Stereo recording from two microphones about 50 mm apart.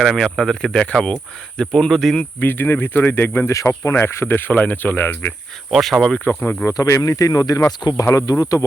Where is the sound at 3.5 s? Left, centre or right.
Left.